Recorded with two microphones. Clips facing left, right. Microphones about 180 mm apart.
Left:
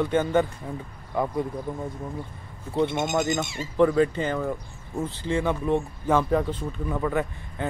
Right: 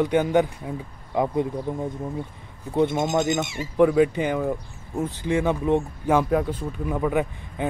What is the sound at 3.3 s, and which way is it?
Speech, 20° right (ahead or behind).